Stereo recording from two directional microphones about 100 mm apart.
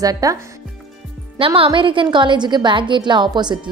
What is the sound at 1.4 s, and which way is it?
A woman's voice, 65° right (ahead or behind).